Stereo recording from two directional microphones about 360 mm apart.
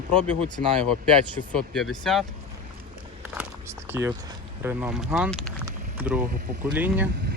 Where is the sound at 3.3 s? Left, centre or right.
Centre.